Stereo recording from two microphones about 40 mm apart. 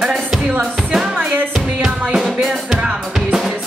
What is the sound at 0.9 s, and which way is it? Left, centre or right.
Music, centre.